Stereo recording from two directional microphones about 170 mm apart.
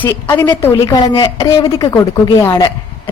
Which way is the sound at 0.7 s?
30° left (ahead or behind).